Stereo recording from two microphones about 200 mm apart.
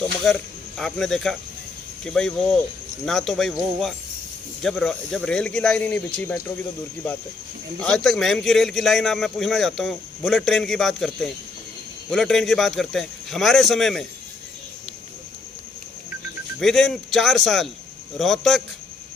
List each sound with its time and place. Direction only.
0.3 s a man's voice: centre (ahead or behind)
7.8 s a man's voice: 5° left (ahead or behind)
16.6 s a man's voice: centre (ahead or behind)